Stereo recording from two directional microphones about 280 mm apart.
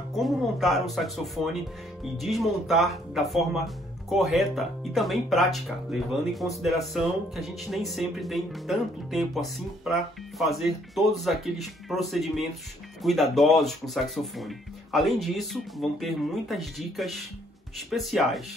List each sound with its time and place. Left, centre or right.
0.1 s speech: centre